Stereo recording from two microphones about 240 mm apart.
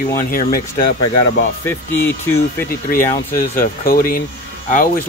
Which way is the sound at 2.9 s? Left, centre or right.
Left.